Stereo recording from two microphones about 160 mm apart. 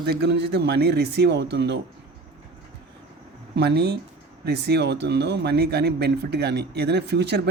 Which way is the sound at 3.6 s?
90° right.